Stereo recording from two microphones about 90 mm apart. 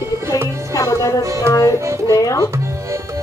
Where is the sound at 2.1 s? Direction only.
40° left (ahead or behind).